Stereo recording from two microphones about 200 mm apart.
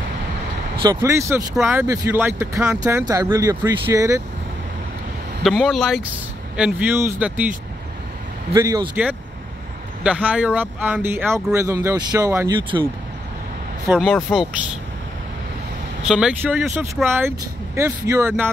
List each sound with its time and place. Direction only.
0.7 s speech: 15° right (ahead or behind)
5.4 s speech: centre (ahead or behind)
8.5 s a man's voice: 20° right (ahead or behind)
10.0 s speech: 5° right (ahead or behind)
13.9 s speech: centre (ahead or behind)
16.0 s speech: 5° right (ahead or behind)